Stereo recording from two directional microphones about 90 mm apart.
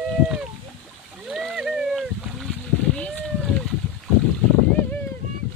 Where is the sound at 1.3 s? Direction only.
5° right (ahead or behind).